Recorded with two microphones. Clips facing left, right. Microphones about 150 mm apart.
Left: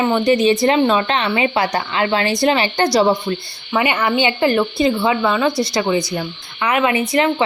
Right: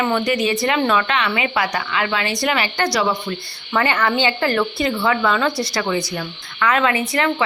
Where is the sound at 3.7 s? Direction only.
15° left (ahead or behind).